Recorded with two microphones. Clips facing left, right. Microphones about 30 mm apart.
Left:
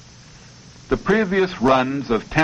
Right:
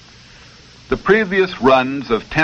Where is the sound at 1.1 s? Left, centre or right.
Right.